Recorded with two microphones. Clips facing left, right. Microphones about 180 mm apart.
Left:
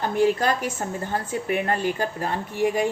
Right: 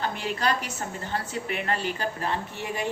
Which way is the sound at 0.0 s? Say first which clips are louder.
Left 7 dB; 45° left (ahead or behind).